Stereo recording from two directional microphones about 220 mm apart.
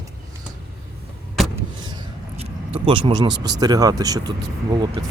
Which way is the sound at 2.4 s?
25° right (ahead or behind).